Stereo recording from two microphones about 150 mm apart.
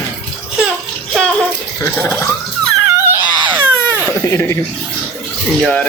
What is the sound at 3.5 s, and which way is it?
Baby cry, 15° right (ahead or behind).